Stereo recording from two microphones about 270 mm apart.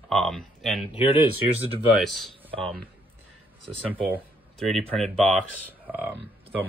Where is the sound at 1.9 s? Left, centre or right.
Centre.